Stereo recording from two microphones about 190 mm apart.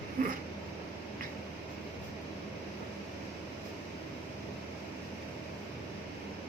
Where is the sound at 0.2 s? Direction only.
45° right (ahead or behind).